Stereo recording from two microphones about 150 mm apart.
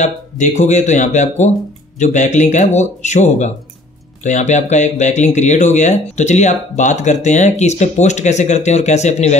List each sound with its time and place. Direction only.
0.0 s speech: 50° left (ahead or behind)